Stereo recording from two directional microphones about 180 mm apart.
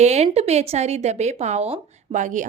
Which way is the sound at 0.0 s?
40° right (ahead or behind).